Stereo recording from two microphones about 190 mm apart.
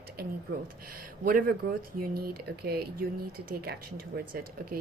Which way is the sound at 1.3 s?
50° right (ahead or behind).